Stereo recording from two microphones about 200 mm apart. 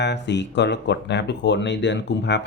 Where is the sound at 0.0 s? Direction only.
60° left (ahead or behind).